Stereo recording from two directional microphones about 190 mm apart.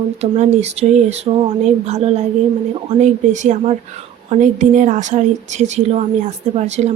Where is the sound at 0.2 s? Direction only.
35° right (ahead or behind).